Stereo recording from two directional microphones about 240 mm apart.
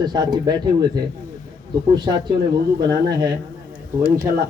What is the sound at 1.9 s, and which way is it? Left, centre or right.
A man's voice, centre.